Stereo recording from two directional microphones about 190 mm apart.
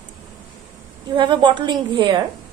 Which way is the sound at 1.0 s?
25° right (ahead or behind).